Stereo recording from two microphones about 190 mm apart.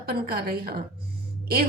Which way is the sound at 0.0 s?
50° right (ahead or behind).